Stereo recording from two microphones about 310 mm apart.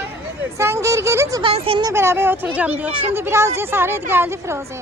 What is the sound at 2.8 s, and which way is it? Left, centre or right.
Speech, centre.